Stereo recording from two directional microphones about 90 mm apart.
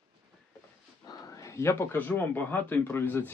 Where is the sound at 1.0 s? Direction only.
45° left (ahead or behind).